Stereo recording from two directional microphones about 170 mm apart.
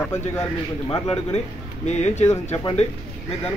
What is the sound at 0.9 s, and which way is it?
Speech, 35° left (ahead or behind).